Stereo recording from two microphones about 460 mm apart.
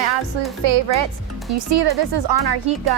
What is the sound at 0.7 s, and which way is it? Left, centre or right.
Speech, right.